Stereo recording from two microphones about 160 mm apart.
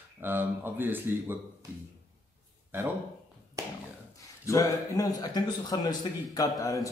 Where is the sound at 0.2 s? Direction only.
15° right (ahead or behind).